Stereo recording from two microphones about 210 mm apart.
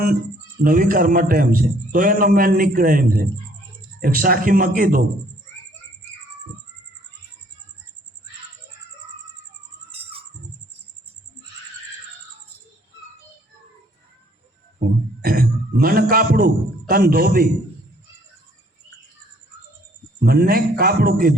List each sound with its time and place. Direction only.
0.6 s a man's voice: 40° right (ahead or behind)
9.9 s bird: 30° right (ahead or behind)
14.8 s a sound: 45° right (ahead or behind)
20.2 s a man's voice: 45° right (ahead or behind)